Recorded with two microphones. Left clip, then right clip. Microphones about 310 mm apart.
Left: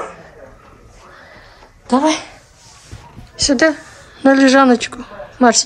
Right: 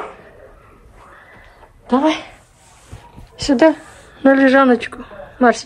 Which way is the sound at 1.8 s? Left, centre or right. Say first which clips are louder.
Left 1 dB; centre.